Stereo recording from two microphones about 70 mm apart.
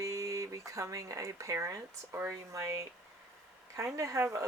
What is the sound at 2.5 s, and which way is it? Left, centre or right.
Speech, right.